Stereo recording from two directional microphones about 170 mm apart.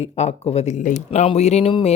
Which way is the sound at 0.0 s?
40° left (ahead or behind).